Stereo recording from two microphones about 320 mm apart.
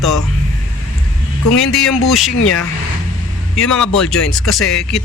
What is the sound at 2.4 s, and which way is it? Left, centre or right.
Speech, left.